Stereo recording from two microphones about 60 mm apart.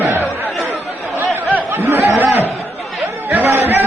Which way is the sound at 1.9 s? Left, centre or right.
Right.